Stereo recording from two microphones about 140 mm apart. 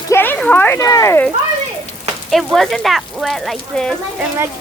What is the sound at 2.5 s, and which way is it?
Speech, centre (ahead or behind).